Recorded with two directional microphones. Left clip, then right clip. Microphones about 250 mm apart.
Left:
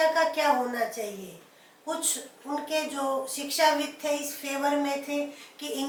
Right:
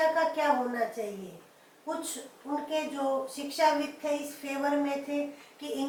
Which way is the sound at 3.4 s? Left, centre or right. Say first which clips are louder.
Left 3 dB; centre.